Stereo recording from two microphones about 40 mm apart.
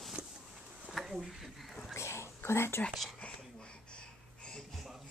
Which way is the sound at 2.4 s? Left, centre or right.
Left.